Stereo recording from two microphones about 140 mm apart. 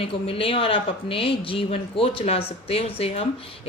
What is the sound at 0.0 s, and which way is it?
Speech, 40° left (ahead or behind).